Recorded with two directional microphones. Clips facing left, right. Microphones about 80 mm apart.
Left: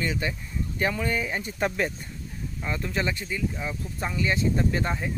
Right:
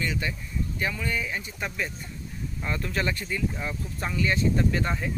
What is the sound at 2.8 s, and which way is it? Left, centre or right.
Speech, centre.